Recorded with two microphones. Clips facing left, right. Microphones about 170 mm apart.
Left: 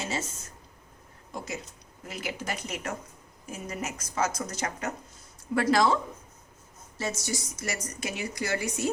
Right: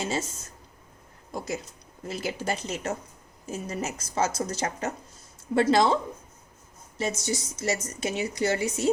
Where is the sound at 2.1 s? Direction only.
30° right (ahead or behind).